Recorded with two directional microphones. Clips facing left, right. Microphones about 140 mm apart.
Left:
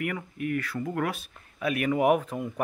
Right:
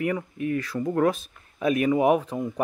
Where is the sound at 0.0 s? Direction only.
25° right (ahead or behind).